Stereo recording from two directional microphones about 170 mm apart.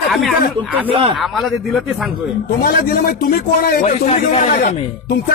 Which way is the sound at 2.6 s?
65° left (ahead or behind).